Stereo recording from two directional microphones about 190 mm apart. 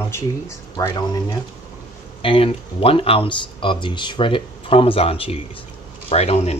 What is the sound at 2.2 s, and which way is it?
Speech, 30° left (ahead or behind).